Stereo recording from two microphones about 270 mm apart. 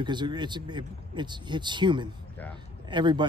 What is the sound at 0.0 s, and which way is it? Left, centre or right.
Speech, centre.